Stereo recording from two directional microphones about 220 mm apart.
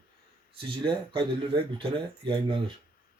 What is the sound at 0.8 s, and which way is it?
Speech, 20° right (ahead or behind).